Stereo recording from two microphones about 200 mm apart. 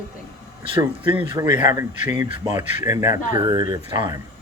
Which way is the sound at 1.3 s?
20° right (ahead or behind).